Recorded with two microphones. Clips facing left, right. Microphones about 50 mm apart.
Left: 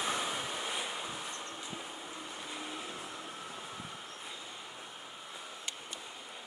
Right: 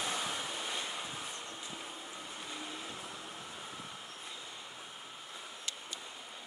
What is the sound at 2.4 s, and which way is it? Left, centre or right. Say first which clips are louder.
Vehicle: left 1 dB; centre.